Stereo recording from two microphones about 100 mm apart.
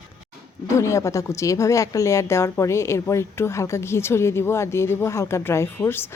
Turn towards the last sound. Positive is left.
turn(degrees=25)  # may be behind; listen again after turning